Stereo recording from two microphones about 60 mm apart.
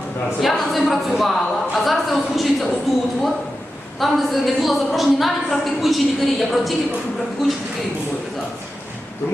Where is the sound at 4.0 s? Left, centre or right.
Centre.